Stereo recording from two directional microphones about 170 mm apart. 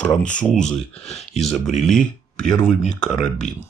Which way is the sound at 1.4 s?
Centre (ahead or behind).